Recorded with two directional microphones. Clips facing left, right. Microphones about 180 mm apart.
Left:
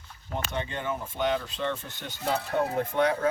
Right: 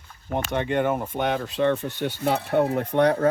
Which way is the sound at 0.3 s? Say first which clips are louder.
Right 9 dB; 60° right (ahead or behind).